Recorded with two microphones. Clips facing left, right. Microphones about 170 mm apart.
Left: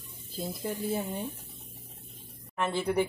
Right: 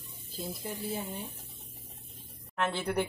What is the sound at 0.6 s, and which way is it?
Speech, 55° left (ahead or behind).